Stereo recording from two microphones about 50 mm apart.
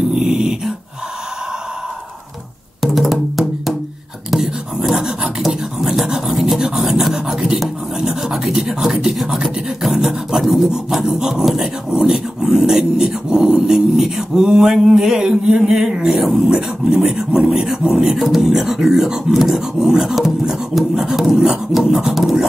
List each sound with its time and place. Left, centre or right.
0.2 s dog: centre
2.8 s music: centre
4.3 s a sound: centre
7.5 s filing: centre
16.4 s speech: centre